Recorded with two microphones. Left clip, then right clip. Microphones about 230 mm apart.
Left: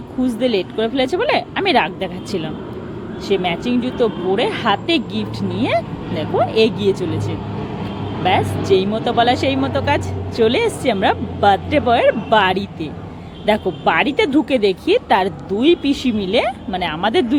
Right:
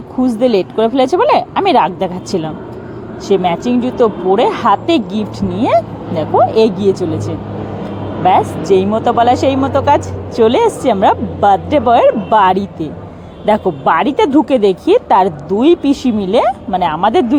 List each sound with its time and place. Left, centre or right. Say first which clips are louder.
0.2 s a woman's voice: right 6 dB; centre